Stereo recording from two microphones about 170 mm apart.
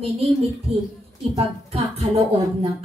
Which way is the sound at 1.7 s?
40° right (ahead or behind).